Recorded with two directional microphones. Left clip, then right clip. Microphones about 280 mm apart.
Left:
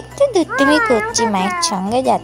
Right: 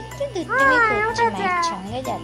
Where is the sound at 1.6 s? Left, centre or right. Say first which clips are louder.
Left 10 dB; left.